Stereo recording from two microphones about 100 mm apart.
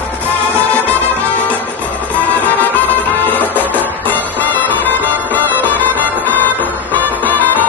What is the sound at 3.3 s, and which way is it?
Music, 15° left (ahead or behind).